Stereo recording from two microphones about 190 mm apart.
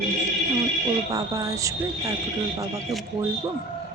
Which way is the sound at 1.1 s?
20° right (ahead or behind).